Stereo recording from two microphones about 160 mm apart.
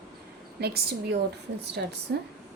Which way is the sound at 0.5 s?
85° right.